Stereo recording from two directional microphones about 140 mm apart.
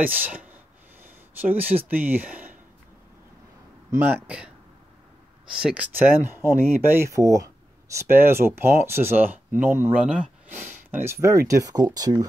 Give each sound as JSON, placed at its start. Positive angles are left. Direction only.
{"t": 0.0, "sound": "speech", "side_deg": -10}
{"t": 3.9, "sound": "speech", "side_deg": -15}
{"t": 5.5, "sound": "speech", "side_deg": -5}